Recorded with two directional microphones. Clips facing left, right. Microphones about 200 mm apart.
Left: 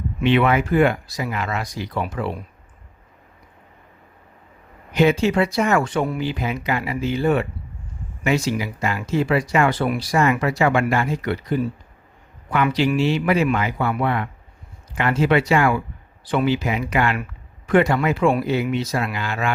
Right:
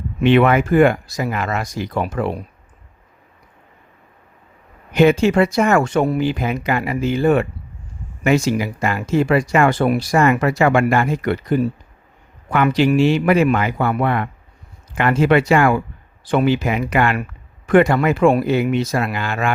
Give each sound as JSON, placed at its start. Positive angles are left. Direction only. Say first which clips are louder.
{"t": 0.2, "sound": "speech", "louder": "right 4 dB", "side_deg": -50}
{"t": 4.9, "sound": "speech", "louder": "right 4 dB", "side_deg": -50}